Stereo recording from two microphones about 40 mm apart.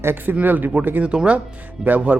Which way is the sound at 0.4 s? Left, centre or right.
Right.